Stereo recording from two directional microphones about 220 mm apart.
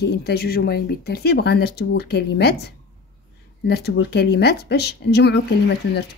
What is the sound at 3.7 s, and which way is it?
A woman's voice, 50° left (ahead or behind).